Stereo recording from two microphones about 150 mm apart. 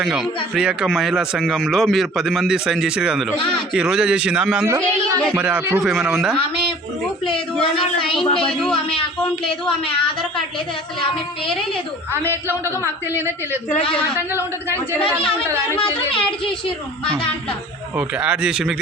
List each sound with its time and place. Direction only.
0.0 s speech: 5° right (ahead or behind)
3.3 s speech: 30° left (ahead or behind)
3.8 s speech: 5° right (ahead or behind)
8.2 s speech: 35° left (ahead or behind)
8.4 s speech: 5° left (ahead or behind)
13.1 s a man's voice: 15° right (ahead or behind)
17.9 s a man's voice: 10° right (ahead or behind)